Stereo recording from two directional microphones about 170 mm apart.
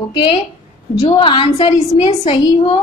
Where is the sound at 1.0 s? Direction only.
30° left (ahead or behind).